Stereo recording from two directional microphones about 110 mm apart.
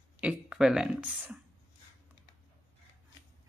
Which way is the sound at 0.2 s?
10° right (ahead or behind).